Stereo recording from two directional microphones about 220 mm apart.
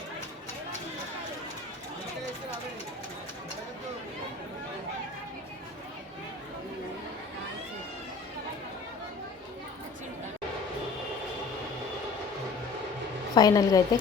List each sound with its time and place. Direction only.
13.3 s a woman's voice: 15° left (ahead or behind)